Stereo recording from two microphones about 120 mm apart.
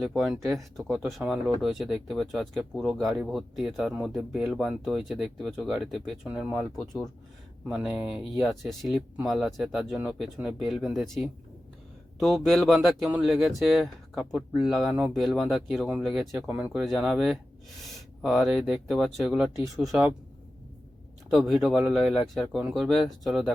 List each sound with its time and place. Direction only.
0.0 s speech: centre (ahead or behind)
6.2 s speech: 10° right (ahead or behind)
7.7 s speech: 5° right (ahead or behind)
21.2 s speech: 5° right (ahead or behind)